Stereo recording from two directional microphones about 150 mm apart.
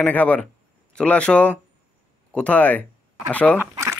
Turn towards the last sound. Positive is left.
turn(degrees=-20)  # may be behind; listen again after turning